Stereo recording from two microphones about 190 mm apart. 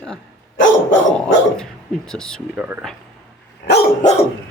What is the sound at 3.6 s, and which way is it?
Dog, 60° left (ahead or behind).